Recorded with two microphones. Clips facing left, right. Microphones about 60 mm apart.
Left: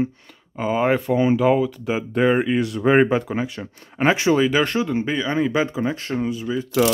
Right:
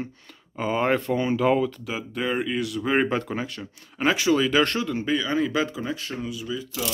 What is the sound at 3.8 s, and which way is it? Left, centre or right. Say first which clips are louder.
Speech: left 4 dB; left.